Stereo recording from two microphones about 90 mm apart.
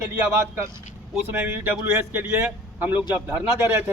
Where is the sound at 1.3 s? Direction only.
20° right (ahead or behind).